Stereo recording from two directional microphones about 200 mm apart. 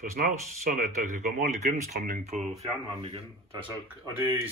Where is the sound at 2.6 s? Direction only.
30° right (ahead or behind).